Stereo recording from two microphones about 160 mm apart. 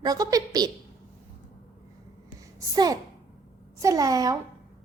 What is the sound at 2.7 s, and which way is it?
A woman's voice, 25° right (ahead or behind).